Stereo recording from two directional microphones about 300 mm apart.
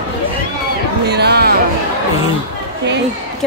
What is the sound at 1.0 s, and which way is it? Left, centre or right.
Music, right.